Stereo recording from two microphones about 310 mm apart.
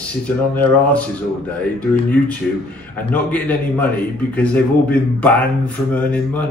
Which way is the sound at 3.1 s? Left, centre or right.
Centre.